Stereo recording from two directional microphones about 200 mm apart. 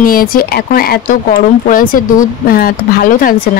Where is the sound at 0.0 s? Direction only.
45° left (ahead or behind).